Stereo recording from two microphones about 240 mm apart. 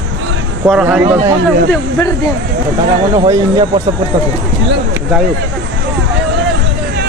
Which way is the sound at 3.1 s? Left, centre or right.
Centre.